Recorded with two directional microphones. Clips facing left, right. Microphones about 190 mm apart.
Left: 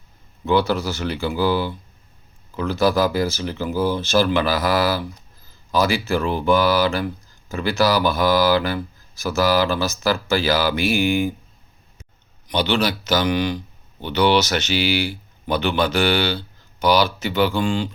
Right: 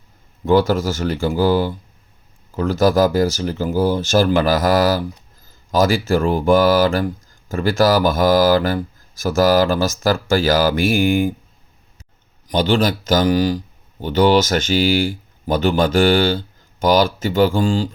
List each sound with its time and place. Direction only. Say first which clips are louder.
0.4 s speech: right 4 dB; 45° right (ahead or behind)
12.5 s speech: right 4 dB; 45° right (ahead or behind)